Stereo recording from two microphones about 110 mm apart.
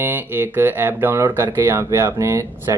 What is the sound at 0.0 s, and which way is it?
Speech, 20° right (ahead or behind).